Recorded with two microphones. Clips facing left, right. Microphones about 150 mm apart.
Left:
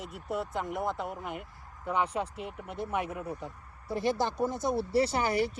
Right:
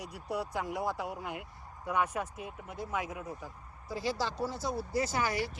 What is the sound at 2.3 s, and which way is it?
Speech, 65° left (ahead or behind).